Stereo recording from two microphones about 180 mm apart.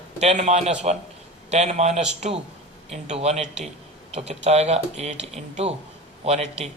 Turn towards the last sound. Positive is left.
turn(degrees=-35)  # may be behind; listen again after turning